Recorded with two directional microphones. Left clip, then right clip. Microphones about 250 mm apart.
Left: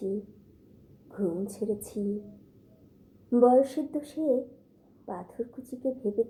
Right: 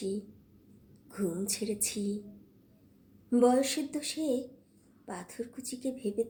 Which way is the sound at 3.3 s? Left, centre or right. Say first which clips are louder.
Left 4 dB; right.